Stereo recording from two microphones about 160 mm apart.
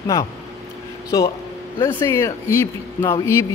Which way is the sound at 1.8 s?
20° left (ahead or behind).